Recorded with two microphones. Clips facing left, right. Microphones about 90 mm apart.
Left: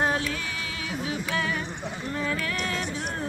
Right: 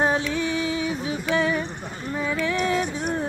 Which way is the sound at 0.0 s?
25° right (ahead or behind).